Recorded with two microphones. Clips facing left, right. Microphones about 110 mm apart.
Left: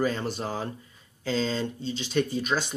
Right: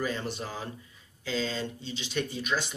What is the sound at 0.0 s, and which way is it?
Speech, 40° left (ahead or behind).